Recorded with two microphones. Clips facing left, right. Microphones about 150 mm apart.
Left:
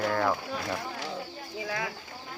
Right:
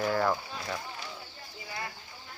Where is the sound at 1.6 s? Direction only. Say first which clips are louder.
Left 7 dB; 90° left.